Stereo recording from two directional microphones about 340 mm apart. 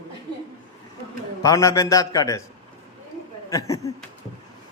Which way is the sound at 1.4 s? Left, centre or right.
Centre.